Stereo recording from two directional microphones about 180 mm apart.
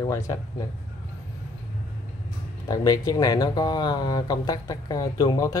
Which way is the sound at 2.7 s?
20° left (ahead or behind).